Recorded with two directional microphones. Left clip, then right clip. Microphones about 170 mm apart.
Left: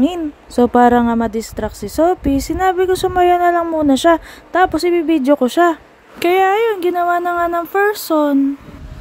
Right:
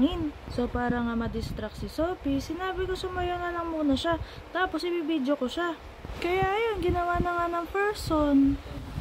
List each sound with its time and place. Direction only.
0.6 s speech: 50° left (ahead or behind)